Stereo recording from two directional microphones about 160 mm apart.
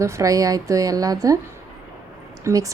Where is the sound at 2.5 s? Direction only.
15° right (ahead or behind).